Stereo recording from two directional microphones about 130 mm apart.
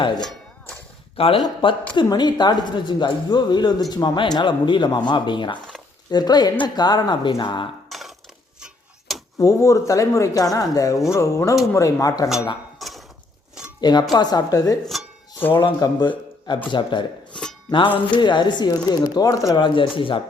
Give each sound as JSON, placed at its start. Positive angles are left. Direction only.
{"t": 0.2, "sound": "music", "side_deg": 5}
{"t": 1.1, "sound": "speech", "side_deg": 45}
{"t": 7.9, "sound": "a sound", "side_deg": 0}
{"t": 8.6, "sound": "tick-tock", "side_deg": 0}
{"t": 9.4, "sound": "speech", "side_deg": 25}
{"t": 12.8, "sound": "a sound", "side_deg": 0}
{"t": 14.1, "sound": "speech", "side_deg": 30}